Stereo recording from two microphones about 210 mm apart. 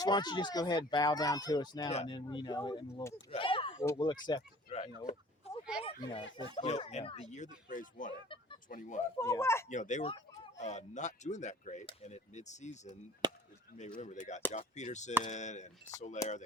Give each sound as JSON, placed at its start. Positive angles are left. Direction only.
{"t": 0.0, "sound": "speech", "side_deg": 20}
{"t": 1.9, "sound": "speech", "side_deg": 30}
{"t": 2.1, "sound": "speech", "side_deg": 20}
{"t": 3.3, "sound": "a sound", "side_deg": 25}
{"t": 3.9, "sound": "speech", "side_deg": 20}
{"t": 9.1, "sound": "speech", "side_deg": 10}
{"t": 9.6, "sound": "speech", "side_deg": 35}
{"t": 13.2, "sound": "chop", "side_deg": -20}
{"t": 14.0, "sound": "speech", "side_deg": 35}